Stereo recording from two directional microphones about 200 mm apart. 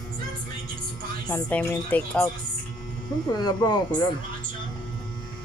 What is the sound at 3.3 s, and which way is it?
Speech, 20° left (ahead or behind).